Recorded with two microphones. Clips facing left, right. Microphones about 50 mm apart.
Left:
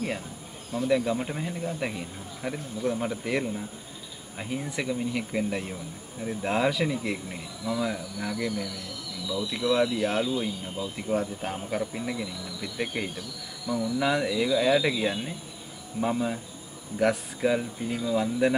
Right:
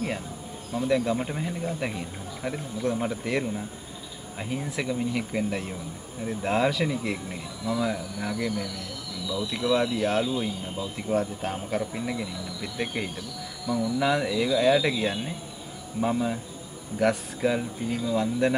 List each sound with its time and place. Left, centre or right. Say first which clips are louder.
0.7 s speech: even; centre